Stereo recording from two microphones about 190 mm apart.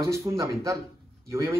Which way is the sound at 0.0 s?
15° right (ahead or behind).